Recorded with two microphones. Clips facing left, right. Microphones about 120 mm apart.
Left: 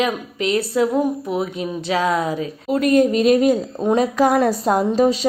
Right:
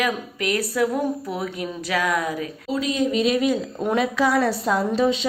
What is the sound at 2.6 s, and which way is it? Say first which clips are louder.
A woman's voice: left 8 dB; 55° left (ahead or behind).